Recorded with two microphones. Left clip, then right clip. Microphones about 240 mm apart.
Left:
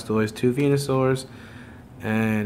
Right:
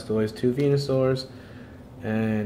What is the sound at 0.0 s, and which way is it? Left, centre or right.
Speech, centre.